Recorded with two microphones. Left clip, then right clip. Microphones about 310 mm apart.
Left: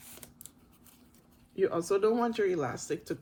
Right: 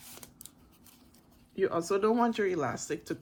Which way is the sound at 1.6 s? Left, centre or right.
Right.